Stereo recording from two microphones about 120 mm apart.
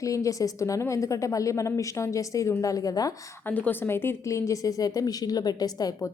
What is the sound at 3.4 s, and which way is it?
A woman's voice, 15° left (ahead or behind).